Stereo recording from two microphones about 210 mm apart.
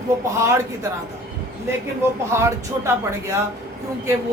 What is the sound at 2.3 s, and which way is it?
Speech, 10° right (ahead or behind).